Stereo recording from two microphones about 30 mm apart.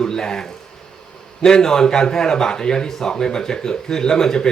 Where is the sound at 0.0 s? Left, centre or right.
Left.